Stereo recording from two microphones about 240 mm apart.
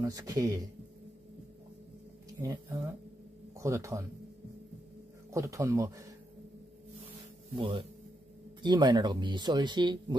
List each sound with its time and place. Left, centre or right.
0.0 s speech: centre
2.4 s speech: centre
5.3 s speech: centre
7.5 s speech: right